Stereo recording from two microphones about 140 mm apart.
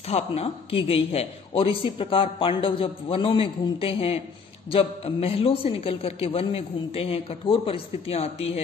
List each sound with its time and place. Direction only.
0.1 s a man's voice: 45° left (ahead or behind)